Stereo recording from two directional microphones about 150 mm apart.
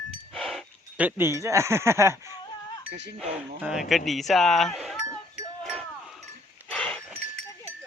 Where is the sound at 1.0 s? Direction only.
15° right (ahead or behind).